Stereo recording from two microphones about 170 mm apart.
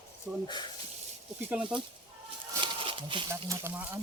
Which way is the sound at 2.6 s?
30° right (ahead or behind).